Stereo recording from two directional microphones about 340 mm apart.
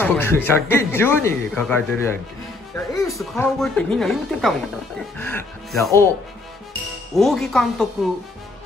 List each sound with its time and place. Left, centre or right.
0.0 s speech: centre
7.2 s speech: centre